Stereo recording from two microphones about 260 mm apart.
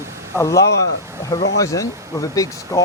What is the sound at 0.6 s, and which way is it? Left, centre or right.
Speech, left.